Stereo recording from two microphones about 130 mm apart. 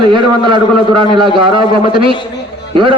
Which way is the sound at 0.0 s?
40° right (ahead or behind).